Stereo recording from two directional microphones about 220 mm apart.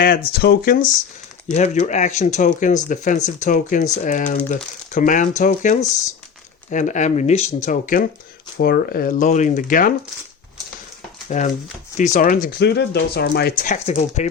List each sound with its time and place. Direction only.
0.3 s speech: 45° left (ahead or behind)
11.3 s speech: 35° left (ahead or behind)